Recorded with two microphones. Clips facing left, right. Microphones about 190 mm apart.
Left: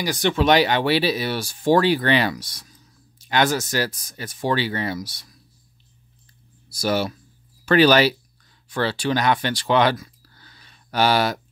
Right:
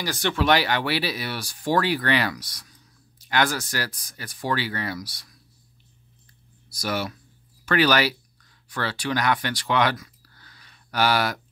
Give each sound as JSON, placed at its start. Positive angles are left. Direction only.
{"t": 0.0, "sound": "speech", "side_deg": 15}
{"t": 6.7, "sound": "speech", "side_deg": 30}